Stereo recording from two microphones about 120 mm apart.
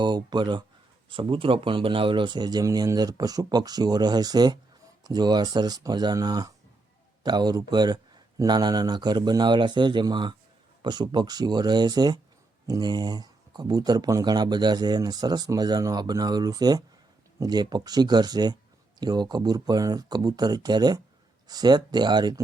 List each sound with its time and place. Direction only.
0.0 s speech: 40° right (ahead or behind)